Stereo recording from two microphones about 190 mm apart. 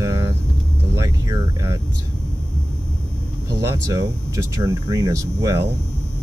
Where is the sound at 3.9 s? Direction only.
15° right (ahead or behind).